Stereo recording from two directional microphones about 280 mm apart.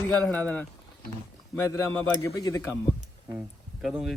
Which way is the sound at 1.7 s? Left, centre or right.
Centre.